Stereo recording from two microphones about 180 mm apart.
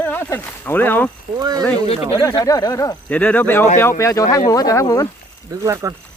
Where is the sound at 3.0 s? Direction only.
10° left (ahead or behind).